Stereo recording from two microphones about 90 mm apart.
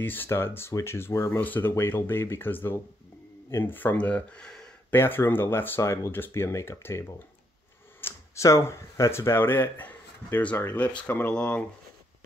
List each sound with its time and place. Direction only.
0.0 s speech: 20° left (ahead or behind)
4.9 s speech: 25° left (ahead or behind)